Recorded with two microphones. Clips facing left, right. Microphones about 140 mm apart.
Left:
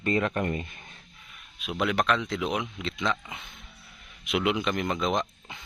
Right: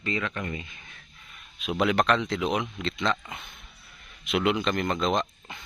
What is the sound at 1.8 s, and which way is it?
Speech, centre (ahead or behind).